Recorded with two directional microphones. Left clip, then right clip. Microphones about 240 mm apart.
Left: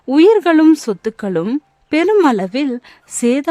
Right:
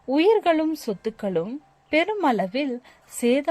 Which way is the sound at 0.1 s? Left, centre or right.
Left.